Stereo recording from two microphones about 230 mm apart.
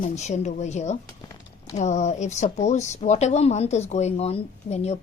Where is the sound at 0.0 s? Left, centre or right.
Left.